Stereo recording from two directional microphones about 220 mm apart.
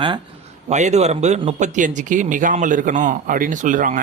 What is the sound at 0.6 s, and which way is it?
Speech, 30° right (ahead or behind).